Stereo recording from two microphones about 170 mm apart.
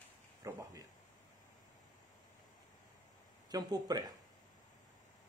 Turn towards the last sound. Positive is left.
turn(degrees=-25)  # may be behind; listen again after turning